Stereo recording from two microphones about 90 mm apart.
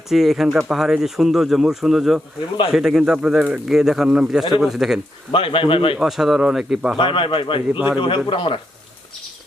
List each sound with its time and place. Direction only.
0.1 s speech: 5° right (ahead or behind)
5.3 s speech: 75° left (ahead or behind)
6.0 s speech: 5° right (ahead or behind)
7.0 s speech: 75° left (ahead or behind)
7.7 s a man's voice: 20° right (ahead or behind)
8.0 s speech: 75° left (ahead or behind)